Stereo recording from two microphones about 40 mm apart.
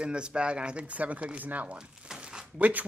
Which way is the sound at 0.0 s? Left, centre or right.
Right.